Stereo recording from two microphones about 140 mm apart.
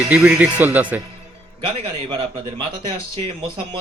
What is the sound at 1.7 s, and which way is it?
Music, 35° right (ahead or behind).